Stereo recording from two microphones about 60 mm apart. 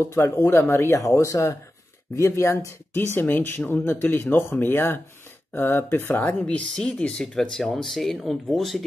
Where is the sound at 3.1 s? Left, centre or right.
Left.